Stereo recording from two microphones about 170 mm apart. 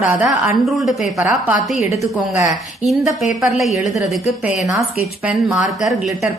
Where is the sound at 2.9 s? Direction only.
Centre (ahead or behind).